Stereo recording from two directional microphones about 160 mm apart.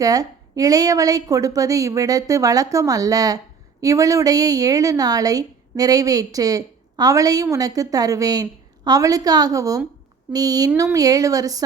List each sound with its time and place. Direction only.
0.0 s a woman's voice: 20° right (ahead or behind)